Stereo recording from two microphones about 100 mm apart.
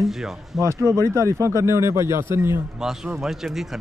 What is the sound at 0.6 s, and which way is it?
Speech, 30° right (ahead or behind).